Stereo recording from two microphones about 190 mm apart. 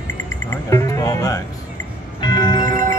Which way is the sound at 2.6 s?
45° right (ahead or behind).